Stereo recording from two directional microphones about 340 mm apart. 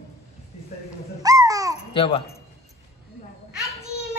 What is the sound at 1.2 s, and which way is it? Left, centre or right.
Babbling, centre.